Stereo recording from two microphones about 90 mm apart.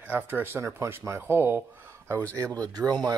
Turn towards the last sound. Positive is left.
turn(degrees=-45)  # may be behind; listen again after turning